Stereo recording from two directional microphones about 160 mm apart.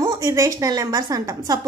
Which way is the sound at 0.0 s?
20° right (ahead or behind).